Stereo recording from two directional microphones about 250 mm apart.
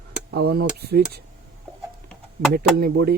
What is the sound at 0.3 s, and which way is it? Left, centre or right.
Speech, right.